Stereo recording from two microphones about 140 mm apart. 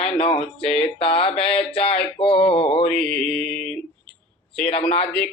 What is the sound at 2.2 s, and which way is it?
Male singing, 40° left (ahead or behind).